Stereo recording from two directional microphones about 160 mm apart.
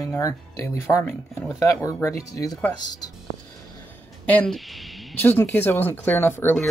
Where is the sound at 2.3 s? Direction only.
20° left (ahead or behind).